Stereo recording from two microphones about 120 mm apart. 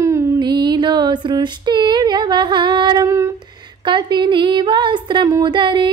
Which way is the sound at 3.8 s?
40° right (ahead or behind).